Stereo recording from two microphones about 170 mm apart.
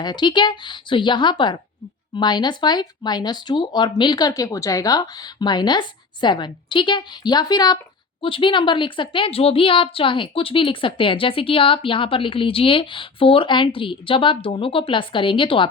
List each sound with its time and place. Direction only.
0.0 s a woman's voice: 25° left (ahead or behind)